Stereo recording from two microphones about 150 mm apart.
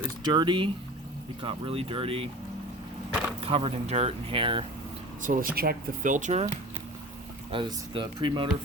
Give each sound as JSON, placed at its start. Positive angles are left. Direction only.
{"t": 0.2, "sound": "speech", "side_deg": -30}
{"t": 3.4, "sound": "speech", "side_deg": -40}
{"t": 5.2, "sound": "speech", "side_deg": -65}
{"t": 7.5, "sound": "speech", "side_deg": -35}